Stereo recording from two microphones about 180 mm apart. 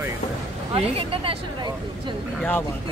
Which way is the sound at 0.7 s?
30° right (ahead or behind).